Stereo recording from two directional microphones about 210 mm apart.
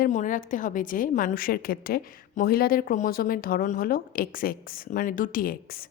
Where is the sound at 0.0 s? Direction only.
35° left (ahead or behind).